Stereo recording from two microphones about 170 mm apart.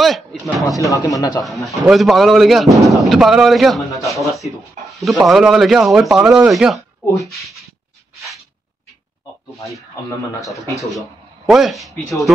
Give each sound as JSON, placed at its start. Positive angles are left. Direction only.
{"t": 0.0, "sound": "speech", "side_deg": 0}
{"t": 0.7, "sound": "speech", "side_deg": 20}
{"t": 1.4, "sound": "speech", "side_deg": 0}
{"t": 10.6, "sound": "speech", "side_deg": 20}
{"t": 11.4, "sound": "speech", "side_deg": 0}